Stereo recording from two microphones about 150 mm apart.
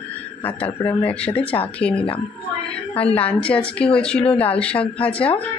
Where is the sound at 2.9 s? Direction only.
10° left (ahead or behind).